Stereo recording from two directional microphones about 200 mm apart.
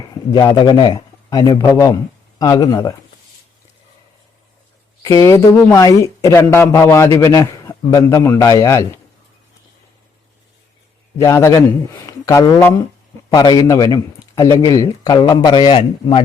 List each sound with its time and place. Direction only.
0.1 s a man's voice: 20° left (ahead or behind)
5.0 s speech: 15° left (ahead or behind)
11.2 s a man's voice: 15° left (ahead or behind)